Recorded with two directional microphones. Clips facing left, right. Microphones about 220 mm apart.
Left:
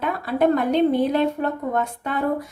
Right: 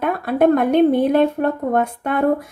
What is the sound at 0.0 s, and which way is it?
Speech, 55° right (ahead or behind).